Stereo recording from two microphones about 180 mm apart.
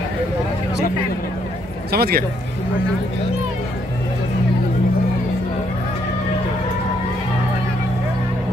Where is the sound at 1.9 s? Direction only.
60° right (ahead or behind).